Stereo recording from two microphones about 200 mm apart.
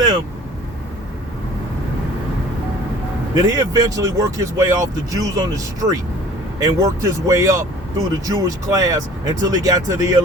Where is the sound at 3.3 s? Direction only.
15° right (ahead or behind).